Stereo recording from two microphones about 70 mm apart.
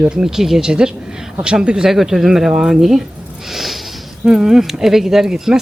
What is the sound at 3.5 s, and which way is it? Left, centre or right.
Snort, centre.